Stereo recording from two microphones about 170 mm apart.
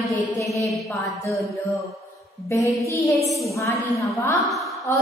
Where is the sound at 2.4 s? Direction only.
20° left (ahead or behind).